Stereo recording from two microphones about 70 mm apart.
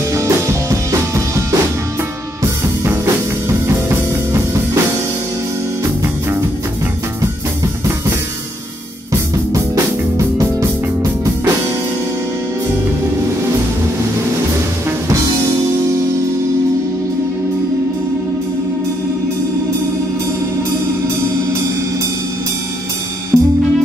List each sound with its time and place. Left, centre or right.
0.1 s music: right
3.4 s music: right
10.1 s music: right
15.0 s music: right
23.3 s music: centre